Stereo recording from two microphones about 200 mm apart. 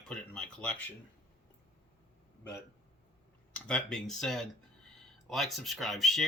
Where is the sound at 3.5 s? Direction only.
5° left (ahead or behind).